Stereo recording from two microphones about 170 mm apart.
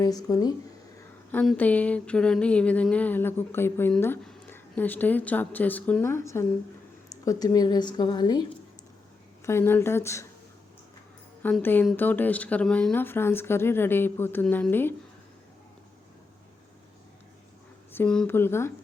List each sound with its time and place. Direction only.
0.0 s a woman's voice: 20° left (ahead or behind)
1.3 s a woman's voice: 10° left (ahead or behind); by 8.4 s 25° left (ahead or behind)
9.5 s speech: 15° left (ahead or behind)
11.6 s speech: 10° left (ahead or behind)
17.9 s speech: 5° left (ahead or behind)